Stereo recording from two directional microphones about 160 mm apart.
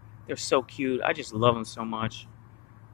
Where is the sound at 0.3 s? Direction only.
Centre (ahead or behind).